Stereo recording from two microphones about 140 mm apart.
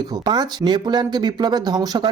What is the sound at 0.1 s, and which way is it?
Speech, 30° right (ahead or behind).